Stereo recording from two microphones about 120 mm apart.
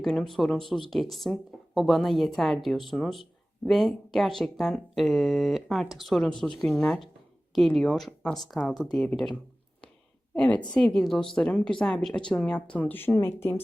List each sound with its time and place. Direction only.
0.0 s speech: 5° left (ahead or behind)
10.3 s a woman's voice: 10° left (ahead or behind)